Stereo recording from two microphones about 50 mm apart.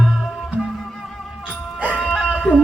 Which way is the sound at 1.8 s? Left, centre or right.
Right.